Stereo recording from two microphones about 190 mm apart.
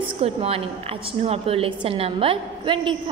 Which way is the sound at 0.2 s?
30° right (ahead or behind).